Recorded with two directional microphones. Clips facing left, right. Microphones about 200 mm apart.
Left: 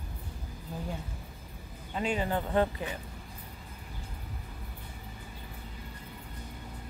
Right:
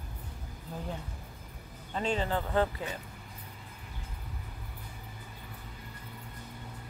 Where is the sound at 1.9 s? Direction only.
10° left (ahead or behind).